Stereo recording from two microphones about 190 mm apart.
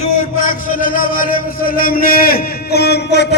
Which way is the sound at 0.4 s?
45° left (ahead or behind).